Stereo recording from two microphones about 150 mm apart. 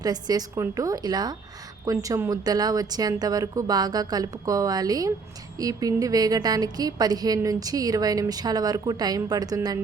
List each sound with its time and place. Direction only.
0.0 s a woman's voice: 25° right (ahead or behind)